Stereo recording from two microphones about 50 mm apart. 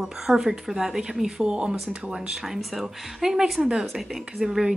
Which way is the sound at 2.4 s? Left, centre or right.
Centre.